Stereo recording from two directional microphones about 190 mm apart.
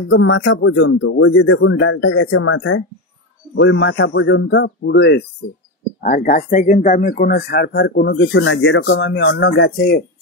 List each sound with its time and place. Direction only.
0.1 s speech: 80° left
3.5 s a man's voice: 75° left (ahead or behind)
6.0 s speech: 45° left (ahead or behind)